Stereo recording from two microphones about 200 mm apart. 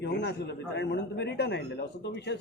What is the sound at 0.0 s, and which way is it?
A man's voice, 55° left (ahead or behind).